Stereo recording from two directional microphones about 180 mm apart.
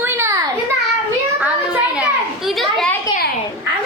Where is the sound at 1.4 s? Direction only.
5° right (ahead or behind).